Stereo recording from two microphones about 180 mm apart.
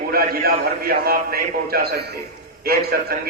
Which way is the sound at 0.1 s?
55° right (ahead or behind).